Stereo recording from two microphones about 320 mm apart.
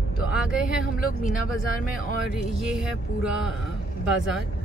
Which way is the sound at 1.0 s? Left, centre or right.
Left.